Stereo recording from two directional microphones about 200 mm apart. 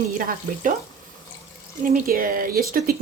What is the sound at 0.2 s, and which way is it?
Speech, 45° right (ahead or behind).